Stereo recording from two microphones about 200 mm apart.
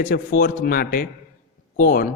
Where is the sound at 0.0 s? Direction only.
45° left (ahead or behind).